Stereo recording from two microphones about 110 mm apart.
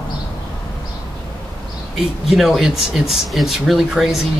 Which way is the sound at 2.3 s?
5° right (ahead or behind).